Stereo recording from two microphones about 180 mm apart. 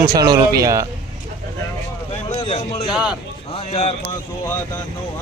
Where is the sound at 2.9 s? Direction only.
5° right (ahead or behind).